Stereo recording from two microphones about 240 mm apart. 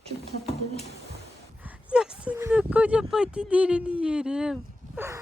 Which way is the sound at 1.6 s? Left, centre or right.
Centre.